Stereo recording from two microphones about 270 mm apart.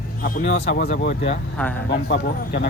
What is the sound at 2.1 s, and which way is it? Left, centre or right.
Speech, left.